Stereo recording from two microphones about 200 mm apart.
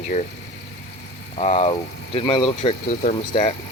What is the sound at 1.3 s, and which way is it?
Speech, 35° left (ahead or behind).